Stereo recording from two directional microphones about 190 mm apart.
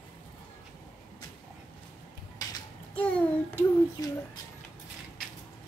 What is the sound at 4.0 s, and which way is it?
Speech, 15° left (ahead or behind).